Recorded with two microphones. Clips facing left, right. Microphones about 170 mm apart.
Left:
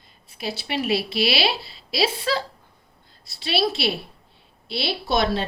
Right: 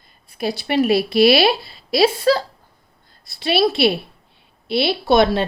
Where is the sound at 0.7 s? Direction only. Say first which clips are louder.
Right 8 dB; 50° right (ahead or behind).